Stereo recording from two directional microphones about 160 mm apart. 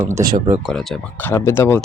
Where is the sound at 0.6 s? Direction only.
Centre (ahead or behind).